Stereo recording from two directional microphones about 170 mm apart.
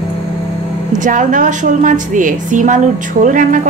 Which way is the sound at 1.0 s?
50° right (ahead or behind).